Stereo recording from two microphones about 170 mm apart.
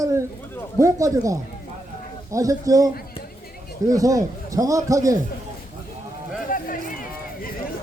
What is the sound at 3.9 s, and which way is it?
Speech, 20° right (ahead or behind).